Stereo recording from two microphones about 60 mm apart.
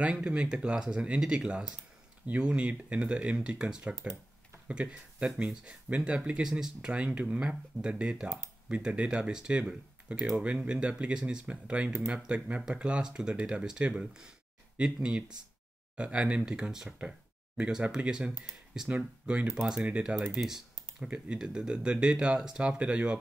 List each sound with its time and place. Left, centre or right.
0.0 s speech: centre
19.5 s speech: centre